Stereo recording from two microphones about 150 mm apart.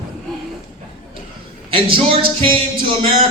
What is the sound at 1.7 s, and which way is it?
Speech, 35° right (ahead or behind).